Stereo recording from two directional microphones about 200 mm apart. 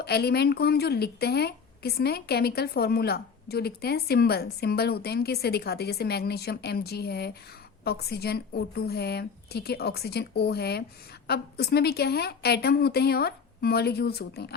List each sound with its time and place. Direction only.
0.0 s a woman's voice: 55° left (ahead or behind)